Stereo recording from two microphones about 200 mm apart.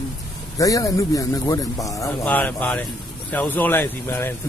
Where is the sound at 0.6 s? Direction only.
15° left (ahead or behind).